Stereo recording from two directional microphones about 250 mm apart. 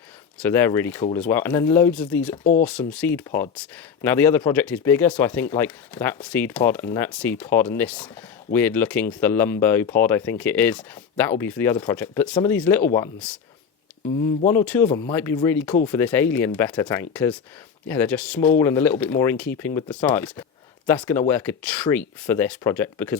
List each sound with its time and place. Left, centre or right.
0.3 s speech: centre
2.4 s speech: left
2.6 s speech: centre
14.5 s speech: centre